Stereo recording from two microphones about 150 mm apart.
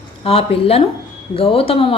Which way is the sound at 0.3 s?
40° left (ahead or behind).